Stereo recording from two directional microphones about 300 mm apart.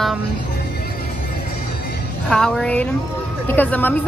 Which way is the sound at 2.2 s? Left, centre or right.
Centre.